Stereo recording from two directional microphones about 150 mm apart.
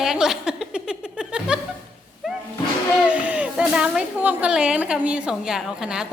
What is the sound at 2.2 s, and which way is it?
Music, centre (ahead or behind).